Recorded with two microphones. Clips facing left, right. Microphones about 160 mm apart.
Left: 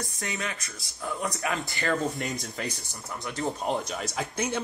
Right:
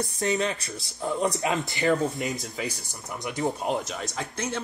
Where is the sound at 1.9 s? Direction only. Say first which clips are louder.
Right 3 dB; centre (ahead or behind).